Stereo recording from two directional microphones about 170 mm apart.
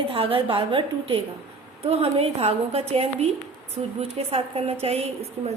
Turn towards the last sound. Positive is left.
turn(degrees=-35)  # may be behind; listen again after turning